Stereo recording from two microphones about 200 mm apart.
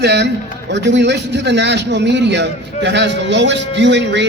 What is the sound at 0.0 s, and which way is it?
A man's voice, 60° right (ahead or behind).